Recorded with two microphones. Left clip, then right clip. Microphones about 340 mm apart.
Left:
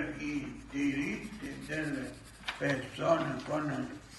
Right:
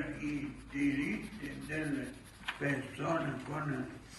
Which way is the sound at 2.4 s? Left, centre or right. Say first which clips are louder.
Left 3 dB; centre.